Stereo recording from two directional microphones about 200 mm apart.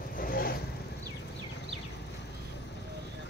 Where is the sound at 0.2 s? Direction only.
45° left (ahead or behind).